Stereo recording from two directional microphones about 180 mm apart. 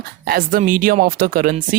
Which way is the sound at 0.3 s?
50° right (ahead or behind).